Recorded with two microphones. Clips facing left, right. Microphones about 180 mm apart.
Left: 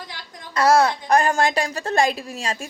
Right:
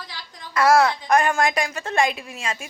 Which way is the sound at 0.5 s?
25° left (ahead or behind).